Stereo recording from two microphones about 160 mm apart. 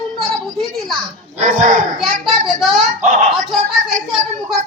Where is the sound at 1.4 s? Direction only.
50° right (ahead or behind).